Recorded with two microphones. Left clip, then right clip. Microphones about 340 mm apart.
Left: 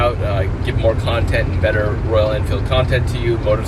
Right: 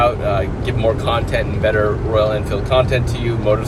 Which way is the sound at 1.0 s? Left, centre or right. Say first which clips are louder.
Right 1 dB; centre.